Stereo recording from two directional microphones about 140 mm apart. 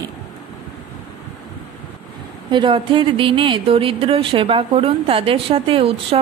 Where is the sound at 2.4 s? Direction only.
35° right (ahead or behind).